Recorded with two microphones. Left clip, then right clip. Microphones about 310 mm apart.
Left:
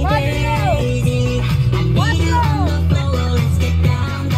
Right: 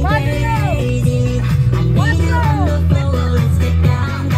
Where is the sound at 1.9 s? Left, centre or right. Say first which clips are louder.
Left 1 dB; centre.